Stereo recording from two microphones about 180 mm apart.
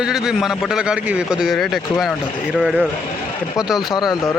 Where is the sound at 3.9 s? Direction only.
25° left (ahead or behind).